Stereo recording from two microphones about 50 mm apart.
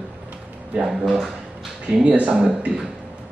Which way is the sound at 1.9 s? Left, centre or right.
Right.